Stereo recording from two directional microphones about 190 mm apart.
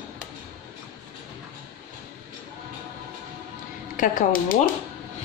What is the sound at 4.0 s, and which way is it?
Speech, 45° left (ahead or behind).